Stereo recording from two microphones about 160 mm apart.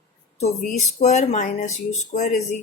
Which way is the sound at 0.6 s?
45° left (ahead or behind).